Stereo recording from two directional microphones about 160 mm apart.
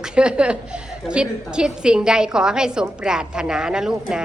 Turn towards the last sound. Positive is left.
turn(degrees=-5)  # may be behind; listen again after turning